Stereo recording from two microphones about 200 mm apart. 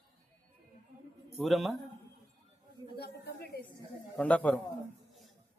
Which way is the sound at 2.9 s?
50° left (ahead or behind).